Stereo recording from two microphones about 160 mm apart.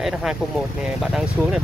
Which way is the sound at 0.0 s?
5° right (ahead or behind).